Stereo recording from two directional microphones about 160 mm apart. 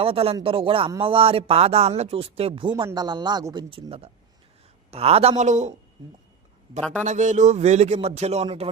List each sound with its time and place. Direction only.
0.0 s speech: 35° right (ahead or behind)
7.0 s a man's voice: 50° right (ahead or behind)